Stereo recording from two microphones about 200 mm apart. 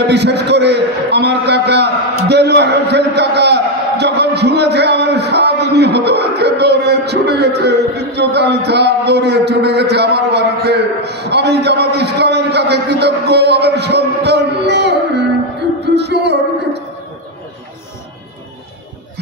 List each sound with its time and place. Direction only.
0.0 s a man's voice: 55° right (ahead or behind)